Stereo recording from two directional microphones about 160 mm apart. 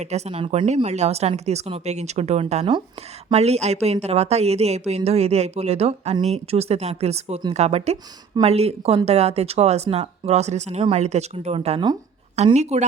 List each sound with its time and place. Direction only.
0.0 s speech: 45° right (ahead or behind)